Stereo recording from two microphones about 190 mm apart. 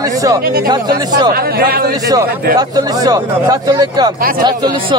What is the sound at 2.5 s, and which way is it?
Speech, 20° right (ahead or behind).